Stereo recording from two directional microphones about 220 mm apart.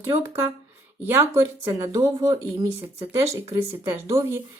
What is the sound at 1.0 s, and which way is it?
A woman's voice, 10° right (ahead or behind).